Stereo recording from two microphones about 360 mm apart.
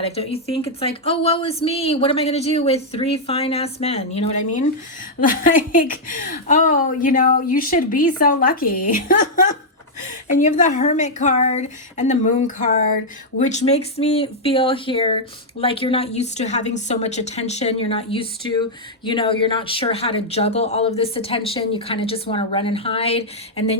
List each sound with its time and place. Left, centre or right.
0.0 s a woman's voice: centre